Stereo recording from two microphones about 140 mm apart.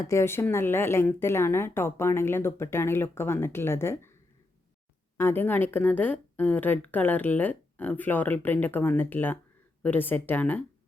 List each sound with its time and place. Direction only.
0.0 s speech: 20° left (ahead or behind)
5.1 s speech: 15° left (ahead or behind)